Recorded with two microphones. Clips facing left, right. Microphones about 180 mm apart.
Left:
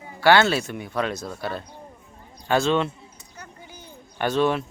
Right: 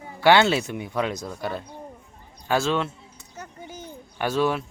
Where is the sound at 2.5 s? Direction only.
5° right (ahead or behind).